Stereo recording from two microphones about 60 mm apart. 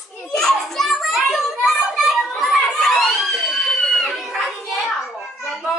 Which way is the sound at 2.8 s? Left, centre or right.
Centre.